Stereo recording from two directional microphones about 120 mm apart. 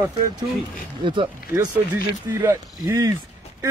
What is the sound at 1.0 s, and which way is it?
Speech, 40° right (ahead or behind).